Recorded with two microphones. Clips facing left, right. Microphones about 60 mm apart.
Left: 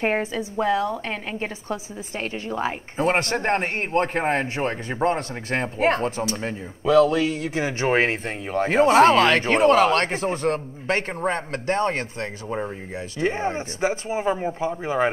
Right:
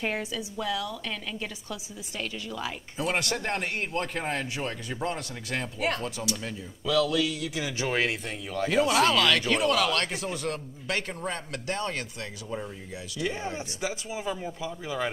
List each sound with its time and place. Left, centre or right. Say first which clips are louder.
0.0 s a woman's voice: left 8 dB; left